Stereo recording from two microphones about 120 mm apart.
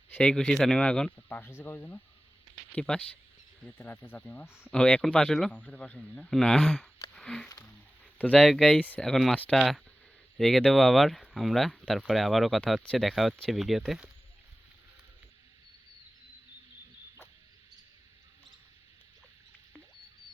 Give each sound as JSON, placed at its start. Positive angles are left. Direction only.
{"t": 0.2, "sound": "a man's voice", "side_deg": 5}
{"t": 4.7, "sound": "a man's voice", "side_deg": 5}
{"t": 7.1, "sound": "a sound", "side_deg": 5}
{"t": 8.2, "sound": "speech", "side_deg": 10}